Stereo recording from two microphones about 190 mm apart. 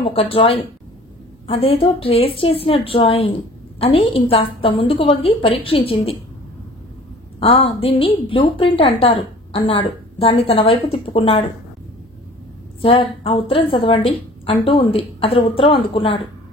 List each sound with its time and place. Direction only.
0.0 s a woman's voice: 30° left (ahead or behind)
7.3 s a woman's voice: 30° left (ahead or behind)
12.8 s a woman's voice: 30° left (ahead or behind)